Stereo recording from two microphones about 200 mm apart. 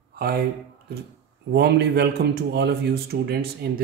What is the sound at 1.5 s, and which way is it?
Speech, 55° right (ahead or behind).